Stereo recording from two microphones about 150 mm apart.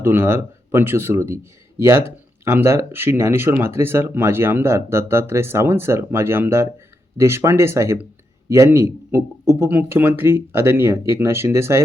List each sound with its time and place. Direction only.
0.0 s a man's voice: 15° right (ahead or behind)